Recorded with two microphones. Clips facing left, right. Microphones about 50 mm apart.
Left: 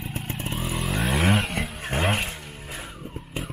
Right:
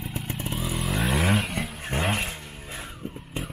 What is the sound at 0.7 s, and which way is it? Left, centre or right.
Vehicle, centre.